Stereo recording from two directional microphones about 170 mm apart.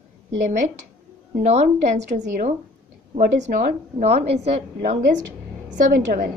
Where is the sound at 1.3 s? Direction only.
40° right (ahead or behind).